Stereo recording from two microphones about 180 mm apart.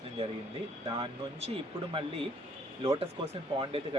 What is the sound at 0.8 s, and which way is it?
Speech, 30° right (ahead or behind).